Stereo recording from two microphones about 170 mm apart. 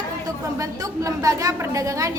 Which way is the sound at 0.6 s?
20° right (ahead or behind).